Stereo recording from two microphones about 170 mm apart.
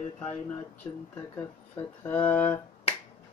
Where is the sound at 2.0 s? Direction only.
10° left (ahead or behind).